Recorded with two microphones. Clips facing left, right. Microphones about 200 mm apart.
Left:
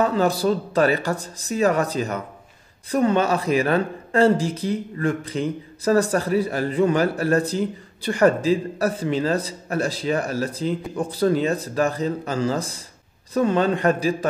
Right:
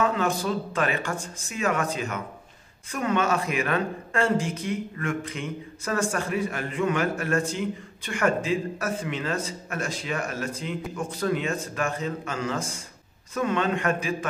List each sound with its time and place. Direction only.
0.0 s speech: 35° left (ahead or behind)